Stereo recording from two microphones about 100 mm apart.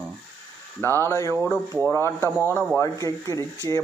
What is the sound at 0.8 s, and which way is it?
Speech, 25° left (ahead or behind).